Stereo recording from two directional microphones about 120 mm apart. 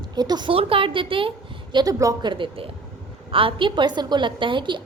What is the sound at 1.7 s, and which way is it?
A woman's voice, 30° right (ahead or behind).